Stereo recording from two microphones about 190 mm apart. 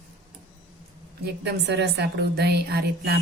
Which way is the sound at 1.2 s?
60° right (ahead or behind).